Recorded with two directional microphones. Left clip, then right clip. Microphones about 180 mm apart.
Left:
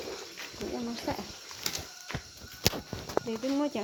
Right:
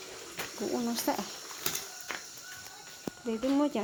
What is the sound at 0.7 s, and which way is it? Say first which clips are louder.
Speech: right 4 dB; 15° right (ahead or behind).